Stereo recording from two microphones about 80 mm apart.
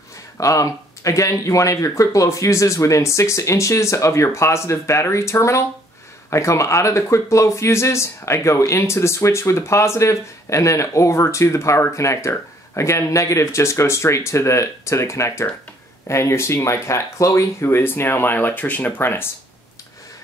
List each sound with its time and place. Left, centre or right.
0.4 s speech: left